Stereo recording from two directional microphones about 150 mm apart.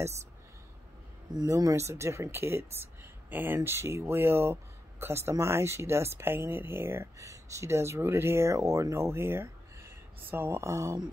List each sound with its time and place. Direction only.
1.3 s speech: 25° right (ahead or behind)